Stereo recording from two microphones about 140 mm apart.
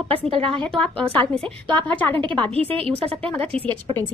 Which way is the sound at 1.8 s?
10° left (ahead or behind).